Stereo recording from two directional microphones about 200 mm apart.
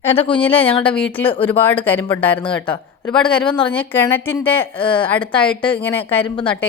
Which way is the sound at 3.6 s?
10° left (ahead or behind).